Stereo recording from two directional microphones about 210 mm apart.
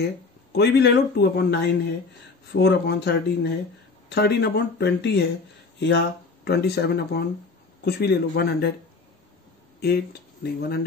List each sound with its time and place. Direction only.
0.5 s speech: 50° left (ahead or behind)
9.8 s speech: 50° left (ahead or behind)